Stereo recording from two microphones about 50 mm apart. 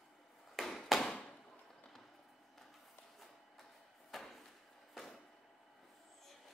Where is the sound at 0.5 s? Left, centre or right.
Centre.